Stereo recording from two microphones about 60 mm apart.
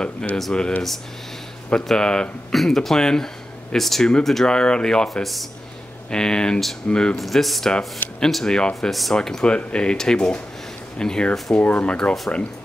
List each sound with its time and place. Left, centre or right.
0.4 s speech: centre
4.5 s speech: centre
6.0 s speech: centre
7.2 s speech: centre